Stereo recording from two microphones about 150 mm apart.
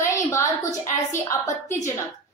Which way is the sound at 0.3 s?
20° left (ahead or behind).